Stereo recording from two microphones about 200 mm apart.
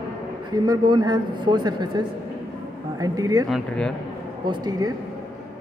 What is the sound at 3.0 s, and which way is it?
Speech, 20° right (ahead or behind).